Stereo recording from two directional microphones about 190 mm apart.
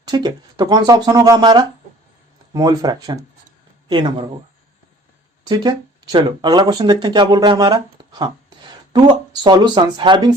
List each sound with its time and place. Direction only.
0.0 s speech: 20° right (ahead or behind)
5.5 s speech: 20° right (ahead or behind)